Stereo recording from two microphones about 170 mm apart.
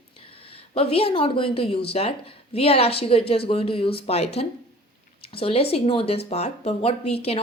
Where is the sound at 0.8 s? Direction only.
35° left (ahead or behind).